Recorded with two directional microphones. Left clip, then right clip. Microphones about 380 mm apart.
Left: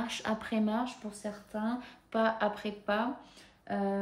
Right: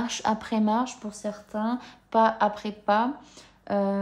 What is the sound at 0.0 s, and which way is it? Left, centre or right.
Speech, centre.